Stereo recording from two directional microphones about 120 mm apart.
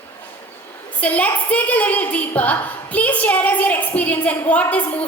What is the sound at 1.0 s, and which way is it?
A woman's voice, 10° left (ahead or behind).